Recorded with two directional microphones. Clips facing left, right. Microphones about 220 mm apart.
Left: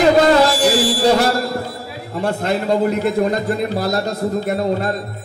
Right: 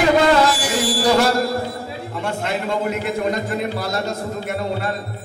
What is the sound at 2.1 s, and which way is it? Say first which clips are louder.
A man's voice: left 5 dB; 40° left (ahead or behind).